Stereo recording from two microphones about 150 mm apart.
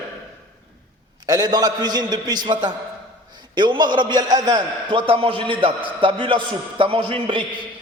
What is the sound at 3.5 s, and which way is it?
A man's voice, 30° right (ahead or behind).